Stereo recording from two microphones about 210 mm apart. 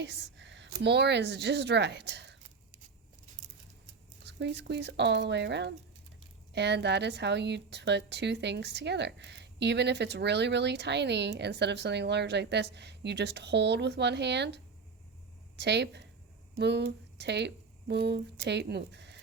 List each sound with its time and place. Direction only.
0.0 s speech: 60° right (ahead or behind)
4.2 s a woman's voice: 55° right (ahead or behind)